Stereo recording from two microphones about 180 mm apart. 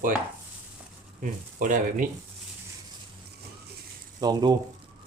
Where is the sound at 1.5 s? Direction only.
45° right (ahead or behind).